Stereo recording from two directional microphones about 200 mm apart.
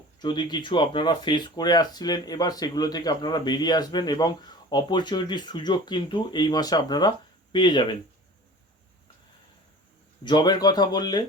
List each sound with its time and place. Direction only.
0.2 s speech: 20° left (ahead or behind)
10.2 s speech: 20° left (ahead or behind)